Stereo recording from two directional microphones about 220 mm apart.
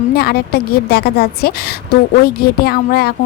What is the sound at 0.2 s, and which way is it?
Speech, 45° left (ahead or behind).